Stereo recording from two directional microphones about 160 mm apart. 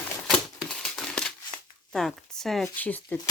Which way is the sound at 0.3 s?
5° left (ahead or behind).